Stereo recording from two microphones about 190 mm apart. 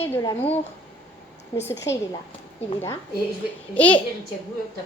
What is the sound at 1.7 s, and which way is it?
Speech, 15° left (ahead or behind).